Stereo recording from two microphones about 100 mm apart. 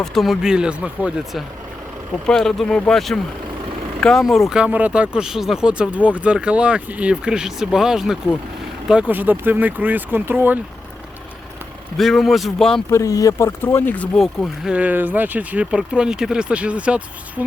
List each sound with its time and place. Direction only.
0.0 s speech: centre (ahead or behind); by 10.6 s 20° right (ahead or behind)
11.9 s speech: centre (ahead or behind)
12.9 s speech: 35° left (ahead or behind)
13.6 s speech: 25° left (ahead or behind)
14.2 s speech: 5° right (ahead or behind)